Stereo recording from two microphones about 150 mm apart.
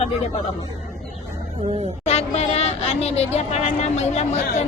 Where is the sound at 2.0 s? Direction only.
45° left (ahead or behind).